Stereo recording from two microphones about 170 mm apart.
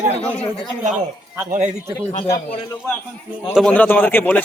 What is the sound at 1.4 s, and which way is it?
Speech, 50° right (ahead or behind).